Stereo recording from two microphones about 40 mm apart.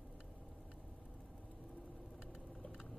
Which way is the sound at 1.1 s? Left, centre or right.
Centre.